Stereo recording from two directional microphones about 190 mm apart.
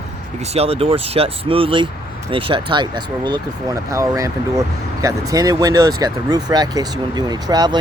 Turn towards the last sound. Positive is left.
turn(degrees=-20)  # may be behind; listen again after turning